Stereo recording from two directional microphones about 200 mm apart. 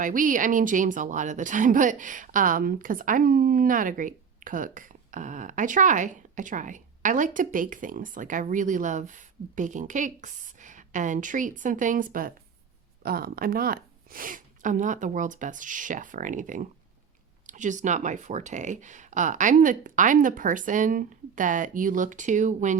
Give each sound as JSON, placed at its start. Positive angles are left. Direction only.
{"t": 0.0, "sound": "a woman's voice", "side_deg": -40}